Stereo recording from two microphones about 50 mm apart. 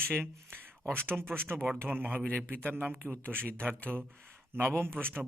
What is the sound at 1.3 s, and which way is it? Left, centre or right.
Speech, right.